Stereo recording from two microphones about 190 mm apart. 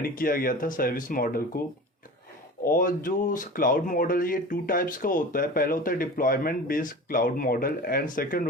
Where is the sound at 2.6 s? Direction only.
45° left (ahead or behind).